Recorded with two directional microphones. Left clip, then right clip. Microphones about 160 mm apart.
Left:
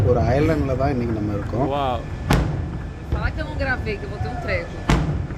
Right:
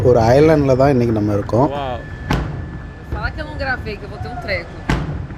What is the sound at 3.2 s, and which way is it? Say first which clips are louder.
Vehicle: right 3 dB; 30° right (ahead or behind).